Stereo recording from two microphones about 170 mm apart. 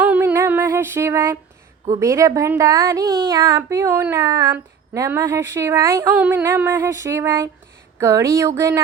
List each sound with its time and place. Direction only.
0.0 s music: 10° right (ahead or behind)
1.9 s a woman's voice: 20° right (ahead or behind)